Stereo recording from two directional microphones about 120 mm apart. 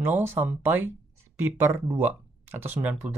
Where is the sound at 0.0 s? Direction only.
20° right (ahead or behind).